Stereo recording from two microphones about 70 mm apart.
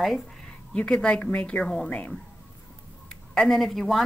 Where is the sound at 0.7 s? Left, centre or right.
Centre.